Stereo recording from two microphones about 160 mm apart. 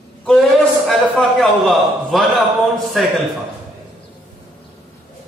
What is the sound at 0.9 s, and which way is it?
A man's voice, centre (ahead or behind).